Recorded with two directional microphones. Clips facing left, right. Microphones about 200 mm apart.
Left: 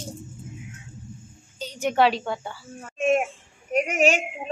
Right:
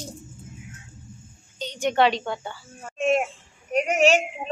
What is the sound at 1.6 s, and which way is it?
Speech, 5° left (ahead or behind).